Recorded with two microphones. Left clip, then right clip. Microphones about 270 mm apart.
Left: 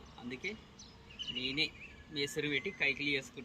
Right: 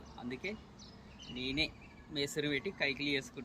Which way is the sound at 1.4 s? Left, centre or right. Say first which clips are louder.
Even; centre.